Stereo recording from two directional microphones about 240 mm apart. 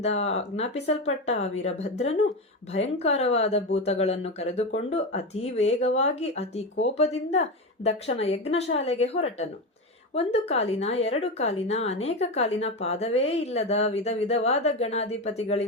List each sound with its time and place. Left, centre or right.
0.0 s a woman's voice: left